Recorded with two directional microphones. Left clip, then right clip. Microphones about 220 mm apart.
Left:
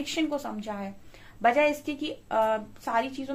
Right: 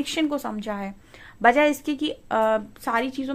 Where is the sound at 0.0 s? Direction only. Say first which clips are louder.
Right 4 dB; 50° right (ahead or behind).